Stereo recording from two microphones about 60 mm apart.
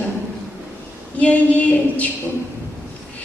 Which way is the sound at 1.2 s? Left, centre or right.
Left.